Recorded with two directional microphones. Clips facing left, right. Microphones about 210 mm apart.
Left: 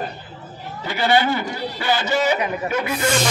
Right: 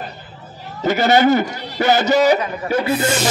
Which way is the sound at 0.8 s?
45° right (ahead or behind).